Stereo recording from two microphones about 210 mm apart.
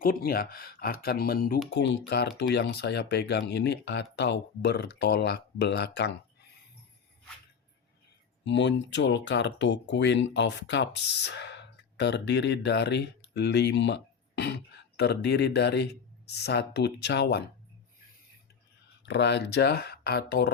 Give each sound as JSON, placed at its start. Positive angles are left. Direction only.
{"t": 0.0, "sound": "speech", "side_deg": 45}
{"t": 8.4, "sound": "speech", "side_deg": 55}
{"t": 19.0, "sound": "speech", "side_deg": 55}